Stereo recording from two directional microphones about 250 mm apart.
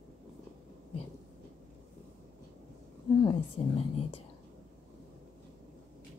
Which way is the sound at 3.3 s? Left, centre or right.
Left.